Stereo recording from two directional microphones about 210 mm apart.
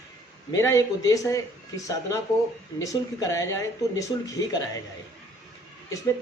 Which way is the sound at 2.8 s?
15° left (ahead or behind).